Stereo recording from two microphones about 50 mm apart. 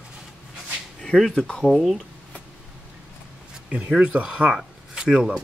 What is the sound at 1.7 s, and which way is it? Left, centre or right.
Speech, centre.